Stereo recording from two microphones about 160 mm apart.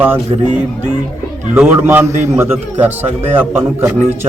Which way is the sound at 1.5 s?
10° right (ahead or behind).